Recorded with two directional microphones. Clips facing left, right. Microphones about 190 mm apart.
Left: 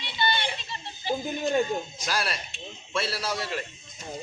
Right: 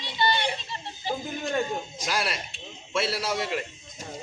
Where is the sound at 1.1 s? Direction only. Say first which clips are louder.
Left 3 dB; 15° left (ahead or behind).